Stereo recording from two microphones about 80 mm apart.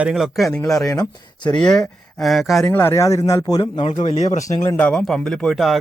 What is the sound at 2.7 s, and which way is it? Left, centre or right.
Speech, left.